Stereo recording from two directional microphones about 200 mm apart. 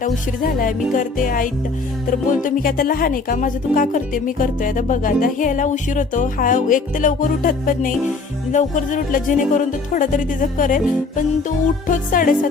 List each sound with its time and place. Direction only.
0.0 s music: 40° left (ahead or behind)
2.0 s speech: 45° left (ahead or behind)
11.9 s music: 40° left (ahead or behind)